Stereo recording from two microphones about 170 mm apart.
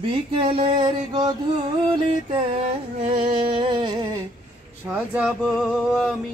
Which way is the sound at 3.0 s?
30° right (ahead or behind).